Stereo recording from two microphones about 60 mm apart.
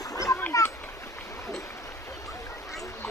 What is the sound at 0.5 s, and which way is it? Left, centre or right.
Splash, left.